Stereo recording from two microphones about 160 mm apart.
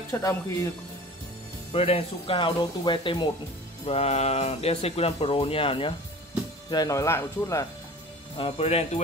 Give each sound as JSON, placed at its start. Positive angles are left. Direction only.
{"t": 0.1, "sound": "speech", "side_deg": 20}
{"t": 1.7, "sound": "speech", "side_deg": 35}
{"t": 6.7, "sound": "speech", "side_deg": 20}
{"t": 8.4, "sound": "speech", "side_deg": 35}